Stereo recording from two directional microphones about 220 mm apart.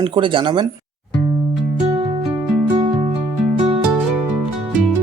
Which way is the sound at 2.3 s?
15° right (ahead or behind).